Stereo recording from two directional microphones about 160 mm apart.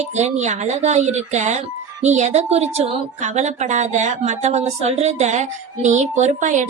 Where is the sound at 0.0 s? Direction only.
45° right (ahead or behind).